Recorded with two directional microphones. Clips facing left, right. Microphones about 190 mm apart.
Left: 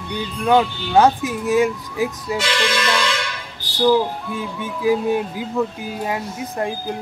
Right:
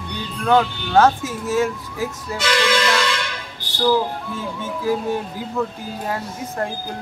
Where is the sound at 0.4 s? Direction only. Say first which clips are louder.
Left 1 dB; 15° left (ahead or behind).